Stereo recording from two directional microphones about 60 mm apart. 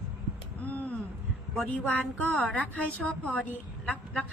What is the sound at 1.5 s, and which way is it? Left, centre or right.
A woman's voice, left.